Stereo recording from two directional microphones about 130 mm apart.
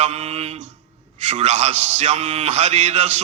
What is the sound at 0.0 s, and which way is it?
Mantra, 55° right (ahead or behind).